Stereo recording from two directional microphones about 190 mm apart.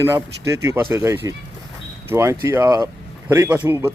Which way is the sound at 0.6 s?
15° right (ahead or behind).